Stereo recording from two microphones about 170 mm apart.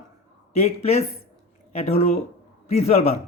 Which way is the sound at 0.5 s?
40° left (ahead or behind).